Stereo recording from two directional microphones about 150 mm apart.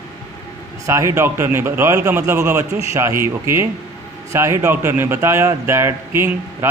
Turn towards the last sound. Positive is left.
turn(degrees=-15)  # may be behind; listen again after turning